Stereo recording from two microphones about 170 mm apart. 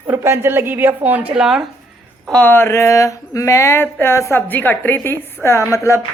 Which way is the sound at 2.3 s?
10° left (ahead or behind).